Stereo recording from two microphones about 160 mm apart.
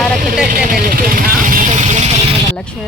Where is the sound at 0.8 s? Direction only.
65° right (ahead or behind); by 2.0 s 45° right (ahead or behind).